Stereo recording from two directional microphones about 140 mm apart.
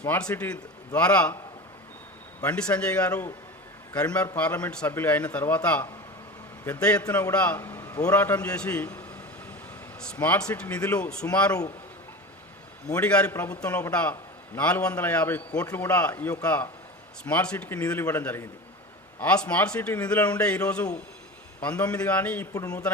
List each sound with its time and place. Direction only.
0.0 s a man's voice: 10° left (ahead or behind)
2.4 s a man's voice: 10° left (ahead or behind)
3.1 s a man's voice: 20° left (ahead or behind)
3.9 s a man's voice: 10° left (ahead or behind)
10.0 s a man's voice: 10° left (ahead or behind)
12.9 s a man's voice: 10° left (ahead or behind)